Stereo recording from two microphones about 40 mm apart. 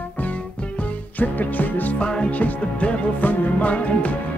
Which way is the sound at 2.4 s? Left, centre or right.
Left.